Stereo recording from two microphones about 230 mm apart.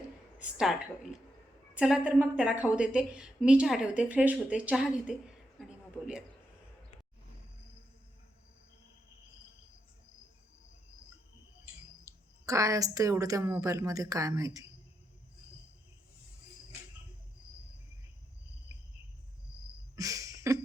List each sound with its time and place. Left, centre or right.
0.3 s a woman's voice: centre
12.0 s a woman's voice: centre
20.0 s a sound: centre